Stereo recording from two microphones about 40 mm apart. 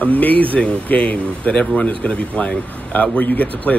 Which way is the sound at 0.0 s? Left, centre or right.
Left.